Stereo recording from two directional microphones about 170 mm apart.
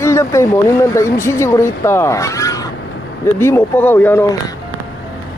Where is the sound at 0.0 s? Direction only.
15° left (ahead or behind).